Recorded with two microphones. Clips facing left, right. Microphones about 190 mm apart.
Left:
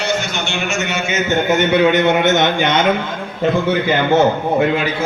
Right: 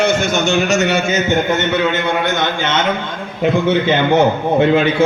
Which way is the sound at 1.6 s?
20° left (ahead or behind).